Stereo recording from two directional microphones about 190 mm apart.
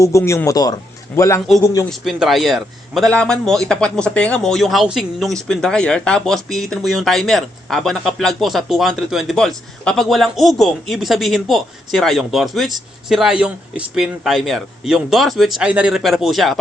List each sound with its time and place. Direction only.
0.0 s a man's voice: 15° left (ahead or behind)
1.9 s a man's voice: centre (ahead or behind)